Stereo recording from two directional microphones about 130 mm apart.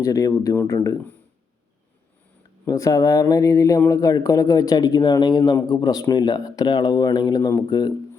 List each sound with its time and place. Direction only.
0.0 s speech: 25° left (ahead or behind)
2.6 s speech: 25° left (ahead or behind)